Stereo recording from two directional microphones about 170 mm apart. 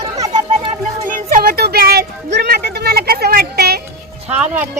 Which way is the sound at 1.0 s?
55° right (ahead or behind).